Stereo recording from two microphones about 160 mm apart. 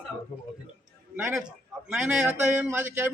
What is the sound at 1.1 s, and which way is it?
A man's voice, 5° right (ahead or behind).